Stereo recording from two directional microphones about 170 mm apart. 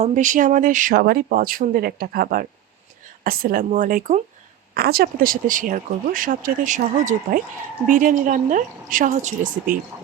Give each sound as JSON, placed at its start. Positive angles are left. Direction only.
{"t": 0.0, "sound": "speech", "side_deg": -45}
{"t": 4.7, "sound": "speech", "side_deg": -65}